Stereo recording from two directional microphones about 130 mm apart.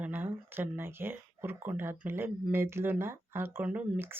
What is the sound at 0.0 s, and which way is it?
Speech, 15° right (ahead or behind).